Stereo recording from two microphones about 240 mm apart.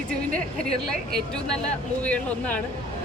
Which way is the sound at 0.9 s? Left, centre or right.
Centre.